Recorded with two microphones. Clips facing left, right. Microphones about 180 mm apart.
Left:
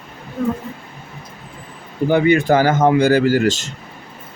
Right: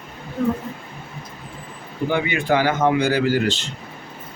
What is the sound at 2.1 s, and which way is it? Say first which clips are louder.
Speech: left 7 dB; 40° left (ahead or behind).